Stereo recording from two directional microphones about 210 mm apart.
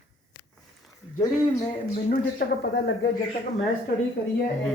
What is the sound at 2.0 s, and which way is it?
Speech, 40° left (ahead or behind).